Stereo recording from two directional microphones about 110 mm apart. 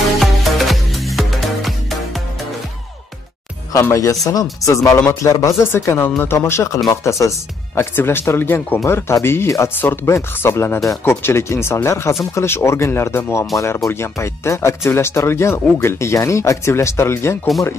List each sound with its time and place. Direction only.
0.2 s music: centre (ahead or behind)
3.9 s speech: 30° left (ahead or behind)